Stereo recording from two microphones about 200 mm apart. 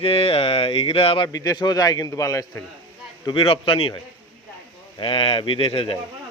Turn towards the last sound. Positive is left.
turn(degrees=25)  # may be behind; listen again after turning